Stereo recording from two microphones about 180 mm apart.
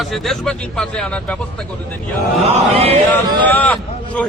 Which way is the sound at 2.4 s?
35° right (ahead or behind).